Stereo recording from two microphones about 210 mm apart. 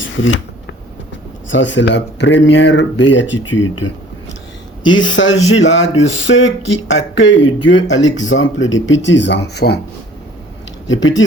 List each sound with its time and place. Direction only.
0.0 s a sound: 65° left (ahead or behind)
1.5 s speech: 60° left (ahead or behind)
4.9 s speech: 60° left (ahead or behind)
10.8 s speech: 65° left (ahead or behind)